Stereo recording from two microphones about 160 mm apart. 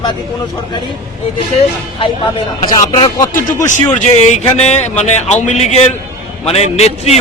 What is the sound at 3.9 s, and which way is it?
Speech, 45° left (ahead or behind).